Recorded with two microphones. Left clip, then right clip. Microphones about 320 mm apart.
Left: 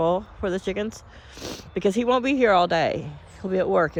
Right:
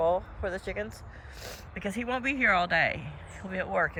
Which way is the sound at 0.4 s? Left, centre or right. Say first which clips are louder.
Left 7 dB; centre.